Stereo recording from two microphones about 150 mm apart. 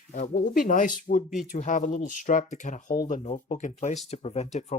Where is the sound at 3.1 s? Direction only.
50° left (ahead or behind).